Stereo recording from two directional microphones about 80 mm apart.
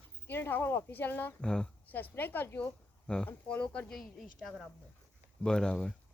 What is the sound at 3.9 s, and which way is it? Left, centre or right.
A woman's voice, centre.